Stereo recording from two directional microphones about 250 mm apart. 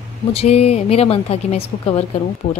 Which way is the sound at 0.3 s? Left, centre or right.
Left.